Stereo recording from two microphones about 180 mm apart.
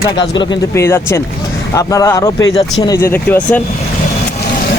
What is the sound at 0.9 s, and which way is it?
Speech, 15° left (ahead or behind).